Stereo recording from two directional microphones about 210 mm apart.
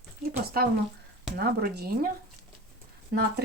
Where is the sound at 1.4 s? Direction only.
45° right (ahead or behind).